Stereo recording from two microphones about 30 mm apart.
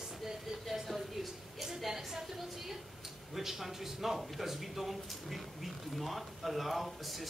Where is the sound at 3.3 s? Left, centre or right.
Centre.